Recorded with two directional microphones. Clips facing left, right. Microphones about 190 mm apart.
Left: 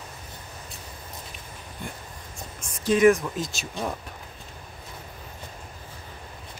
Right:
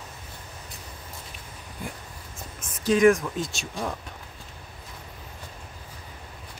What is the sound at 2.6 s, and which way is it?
Speech, centre (ahead or behind).